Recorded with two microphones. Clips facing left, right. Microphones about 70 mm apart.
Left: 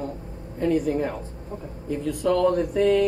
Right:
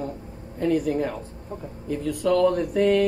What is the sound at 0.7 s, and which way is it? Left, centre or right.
Speech, right.